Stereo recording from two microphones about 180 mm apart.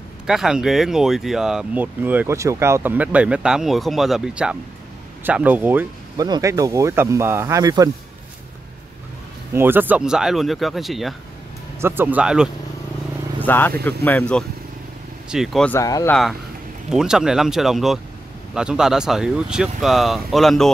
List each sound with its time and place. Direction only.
0.3 s speech: 5° right (ahead or behind)
6.1 s speech: 20° right (ahead or behind)
9.5 s speech: 10° right (ahead or behind)
11.8 s speech: 10° right (ahead or behind)
13.4 s speech: 10° left (ahead or behind)
15.2 s speech: centre (ahead or behind)
15.7 s speech: 20° left (ahead or behind)
16.1 s speech: centre (ahead or behind)